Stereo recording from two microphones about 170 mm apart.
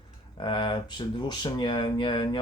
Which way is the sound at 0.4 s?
25° left (ahead or behind).